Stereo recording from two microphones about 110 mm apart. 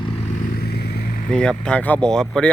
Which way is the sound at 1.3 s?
10° left (ahead or behind).